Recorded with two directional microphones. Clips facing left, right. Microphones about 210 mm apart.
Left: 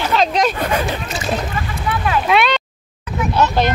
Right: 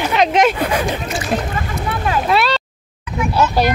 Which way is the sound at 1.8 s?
35° right (ahead or behind).